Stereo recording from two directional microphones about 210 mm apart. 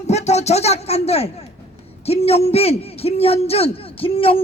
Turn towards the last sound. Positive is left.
turn(degrees=25)  # may be behind; listen again after turning